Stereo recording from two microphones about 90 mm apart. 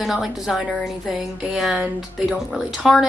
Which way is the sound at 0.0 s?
5° right (ahead or behind).